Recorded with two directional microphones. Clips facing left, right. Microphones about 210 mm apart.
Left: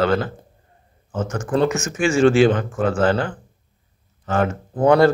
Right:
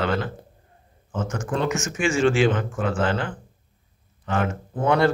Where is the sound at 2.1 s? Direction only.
40° left (ahead or behind).